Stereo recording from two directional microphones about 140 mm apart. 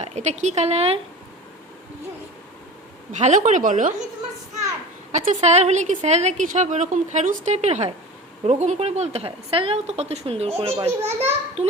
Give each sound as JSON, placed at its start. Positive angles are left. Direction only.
{"t": 0.0, "sound": "a woman's voice", "side_deg": -55}
{"t": 3.1, "sound": "a woman's voice", "side_deg": -60}
{"t": 5.1, "sound": "a woman's voice", "side_deg": -60}